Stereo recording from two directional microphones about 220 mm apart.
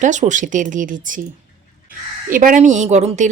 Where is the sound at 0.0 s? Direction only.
35° right (ahead or behind).